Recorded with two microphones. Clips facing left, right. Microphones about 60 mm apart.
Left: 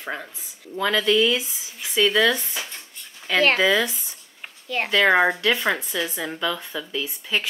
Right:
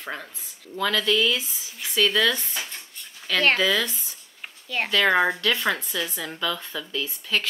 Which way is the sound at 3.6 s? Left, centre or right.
Centre.